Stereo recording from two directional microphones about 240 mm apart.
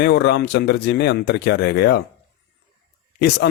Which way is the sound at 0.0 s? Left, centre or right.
Left.